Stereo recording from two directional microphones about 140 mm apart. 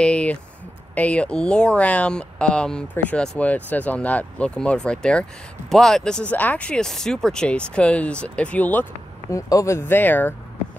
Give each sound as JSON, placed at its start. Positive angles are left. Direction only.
{"t": 0.0, "sound": "a sound", "side_deg": 10}
{"t": 0.9, "sound": "speech", "side_deg": 10}
{"t": 9.3, "sound": "speech", "side_deg": 20}